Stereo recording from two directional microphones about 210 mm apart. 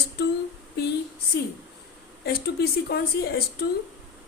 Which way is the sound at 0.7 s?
55° left (ahead or behind).